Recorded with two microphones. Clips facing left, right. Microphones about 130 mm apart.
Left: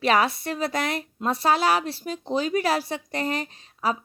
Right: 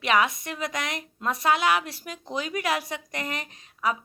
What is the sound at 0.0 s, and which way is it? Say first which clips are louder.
A woman's voice: left 2 dB; 35° left (ahead or behind).